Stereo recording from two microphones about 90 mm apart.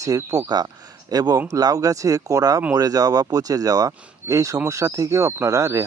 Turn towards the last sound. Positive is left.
turn(degrees=-35)  # may be behind; listen again after turning